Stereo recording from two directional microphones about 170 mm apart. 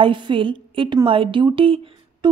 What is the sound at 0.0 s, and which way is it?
A woman's voice, 30° right (ahead or behind).